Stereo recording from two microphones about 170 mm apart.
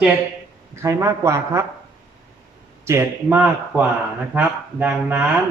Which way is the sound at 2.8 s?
15° right (ahead or behind).